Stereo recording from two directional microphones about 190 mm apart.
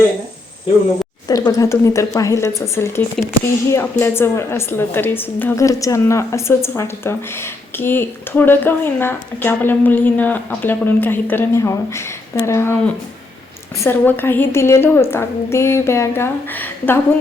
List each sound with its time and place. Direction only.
1.3 s a woman's voice: 20° left (ahead or behind)